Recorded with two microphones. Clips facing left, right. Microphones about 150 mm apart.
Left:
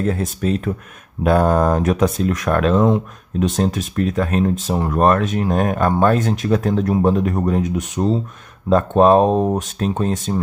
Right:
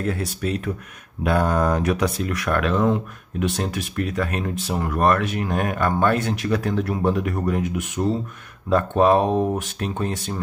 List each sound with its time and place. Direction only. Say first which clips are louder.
0.0 s speech: left 5 dB; 35° left (ahead or behind)